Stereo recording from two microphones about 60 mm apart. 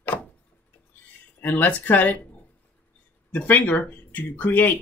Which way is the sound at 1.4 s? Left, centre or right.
Left.